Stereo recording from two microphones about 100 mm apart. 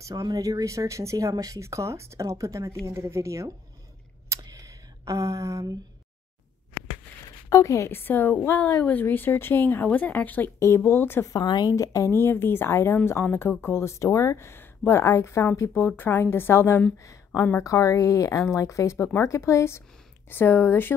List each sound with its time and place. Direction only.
0.1 s speech: 40° right (ahead or behind)
4.3 s a sound: 35° right (ahead or behind)
7.4 s a woman's voice: 30° left (ahead or behind)
11.3 s a woman's voice: 45° left (ahead or behind); by 16.8 s 25° left (ahead or behind)
17.0 s a sound: 30° left (ahead or behind)
17.5 s a woman's voice: 30° left (ahead or behind)